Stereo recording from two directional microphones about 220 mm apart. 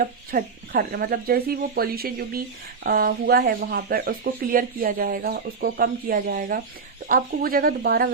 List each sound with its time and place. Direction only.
0.0 s speech: 40° right (ahead or behind)